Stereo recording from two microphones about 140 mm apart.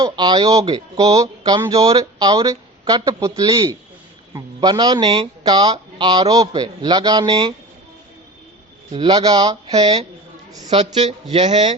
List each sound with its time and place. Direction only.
0.0 s a man's voice: 30° right (ahead or behind)
8.9 s speech: 35° right (ahead or behind)
9.6 s speech: 45° right (ahead or behind)